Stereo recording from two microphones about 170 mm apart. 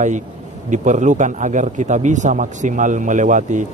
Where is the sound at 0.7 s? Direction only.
45° right (ahead or behind).